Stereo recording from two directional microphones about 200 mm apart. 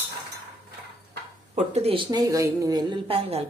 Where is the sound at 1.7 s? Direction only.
30° right (ahead or behind).